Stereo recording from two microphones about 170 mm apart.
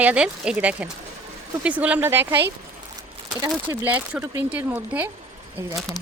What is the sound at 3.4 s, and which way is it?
Speech, 15° right (ahead or behind).